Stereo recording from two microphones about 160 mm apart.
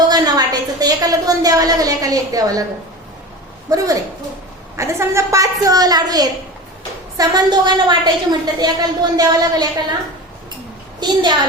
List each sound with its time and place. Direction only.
0.1 s a woman's voice: 25° right (ahead or behind)
3.7 s a woman's voice: 20° right (ahead or behind)
11.0 s a woman's voice: 25° right (ahead or behind)